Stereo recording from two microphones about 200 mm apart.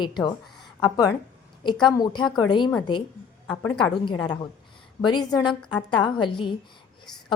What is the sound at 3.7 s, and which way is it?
A woman's voice, 25° left (ahead or behind).